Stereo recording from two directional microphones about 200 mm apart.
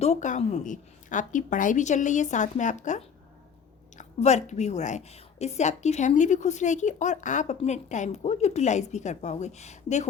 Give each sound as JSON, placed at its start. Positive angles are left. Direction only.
{"t": 0.0, "sound": "a woman's voice", "side_deg": 35}